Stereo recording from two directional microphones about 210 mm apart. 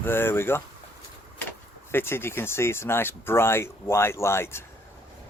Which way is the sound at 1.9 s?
10° left (ahead or behind).